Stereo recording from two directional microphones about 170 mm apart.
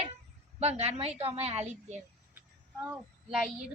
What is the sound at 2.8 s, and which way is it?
Speech, 5° right (ahead or behind).